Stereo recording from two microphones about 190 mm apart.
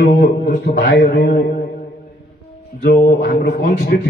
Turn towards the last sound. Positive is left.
turn(degrees=55)  # may be behind; listen again after turning